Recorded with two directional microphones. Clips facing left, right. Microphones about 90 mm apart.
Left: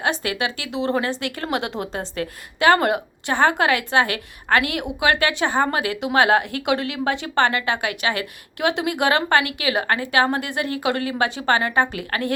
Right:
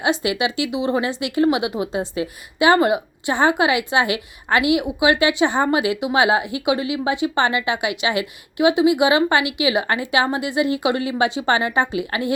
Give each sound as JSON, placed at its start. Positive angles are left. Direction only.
{"t": 0.0, "sound": "a woman's voice", "side_deg": -15}